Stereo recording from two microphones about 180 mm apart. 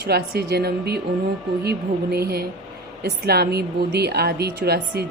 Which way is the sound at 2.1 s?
60° right (ahead or behind).